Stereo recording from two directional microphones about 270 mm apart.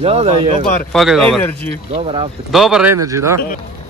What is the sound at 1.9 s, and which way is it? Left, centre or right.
Speech, right.